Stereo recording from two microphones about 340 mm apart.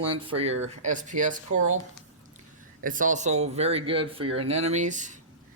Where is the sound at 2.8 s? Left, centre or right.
Right.